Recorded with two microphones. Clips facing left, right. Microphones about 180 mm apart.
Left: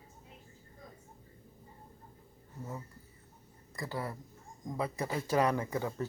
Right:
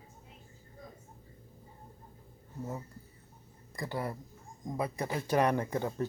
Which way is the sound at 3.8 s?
20° right (ahead or behind).